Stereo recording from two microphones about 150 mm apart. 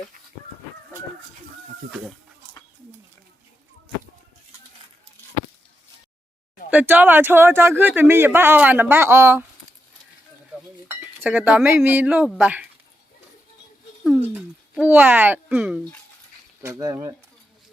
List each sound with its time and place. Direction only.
6.7 s speech: 10° right (ahead or behind)
10.8 s cutlery: 10° right (ahead or behind)
12.4 s speech: 10° right (ahead or behind)
14.2 s a sound: 10° right (ahead or behind)
16.7 s speech: 25° right (ahead or behind)